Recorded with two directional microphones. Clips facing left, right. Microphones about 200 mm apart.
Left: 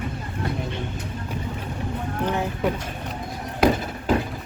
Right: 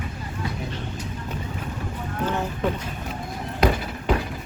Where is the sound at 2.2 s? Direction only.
15° left (ahead or behind).